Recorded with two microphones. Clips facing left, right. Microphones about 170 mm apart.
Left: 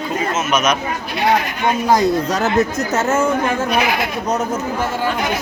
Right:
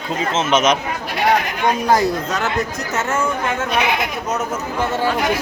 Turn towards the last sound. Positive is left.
turn(degrees=-25)  # may be behind; listen again after turning